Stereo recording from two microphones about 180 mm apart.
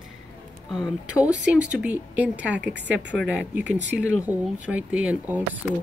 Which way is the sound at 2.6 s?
75° right (ahead or behind).